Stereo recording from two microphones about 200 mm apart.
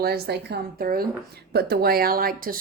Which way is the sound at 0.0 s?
55° right (ahead or behind).